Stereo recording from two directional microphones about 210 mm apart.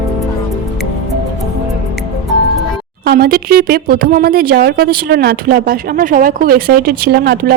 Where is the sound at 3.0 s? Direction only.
45° right (ahead or behind).